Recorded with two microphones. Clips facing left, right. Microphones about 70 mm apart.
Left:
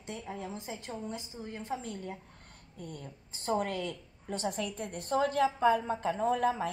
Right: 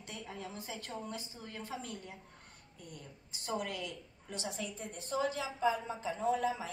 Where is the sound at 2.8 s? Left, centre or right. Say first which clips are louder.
Left 7 dB; left.